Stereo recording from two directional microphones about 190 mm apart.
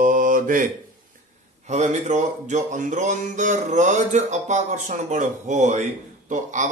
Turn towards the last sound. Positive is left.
turn(degrees=-40)  # may be behind; listen again after turning